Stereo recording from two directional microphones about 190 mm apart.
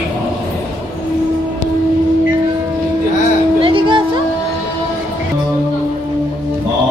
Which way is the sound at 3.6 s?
25° right (ahead or behind).